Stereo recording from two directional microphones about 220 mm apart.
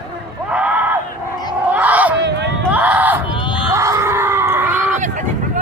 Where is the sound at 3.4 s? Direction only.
20° left (ahead or behind).